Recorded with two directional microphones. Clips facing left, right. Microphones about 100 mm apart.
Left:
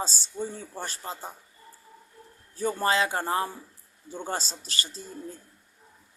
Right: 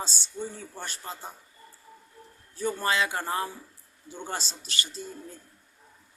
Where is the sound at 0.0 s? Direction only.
35° left (ahead or behind).